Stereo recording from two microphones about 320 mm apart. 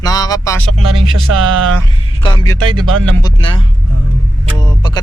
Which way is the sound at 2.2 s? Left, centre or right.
Centre.